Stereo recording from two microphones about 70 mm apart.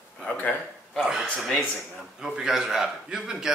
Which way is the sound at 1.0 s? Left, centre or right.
Centre.